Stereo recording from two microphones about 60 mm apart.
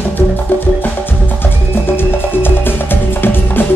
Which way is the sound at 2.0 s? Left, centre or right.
Left.